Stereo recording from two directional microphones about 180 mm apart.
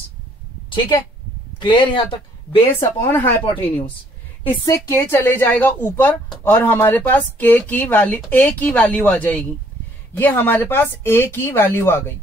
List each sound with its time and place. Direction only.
1.6 s speech: 25° left (ahead or behind)
2.8 s speech: 15° left (ahead or behind)